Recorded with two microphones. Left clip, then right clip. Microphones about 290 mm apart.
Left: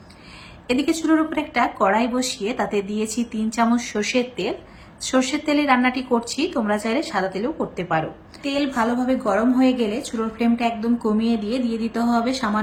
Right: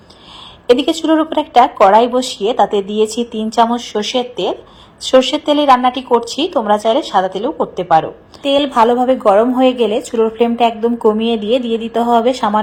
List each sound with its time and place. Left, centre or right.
0.7 s speech: right